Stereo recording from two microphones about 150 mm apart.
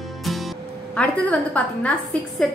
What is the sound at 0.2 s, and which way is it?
Music, centre (ahead or behind).